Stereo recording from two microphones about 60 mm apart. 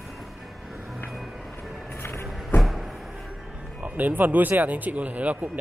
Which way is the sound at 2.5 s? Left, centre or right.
Centre.